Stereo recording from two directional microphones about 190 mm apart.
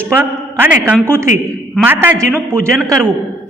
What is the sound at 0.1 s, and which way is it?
A woman's voice, 10° right (ahead or behind).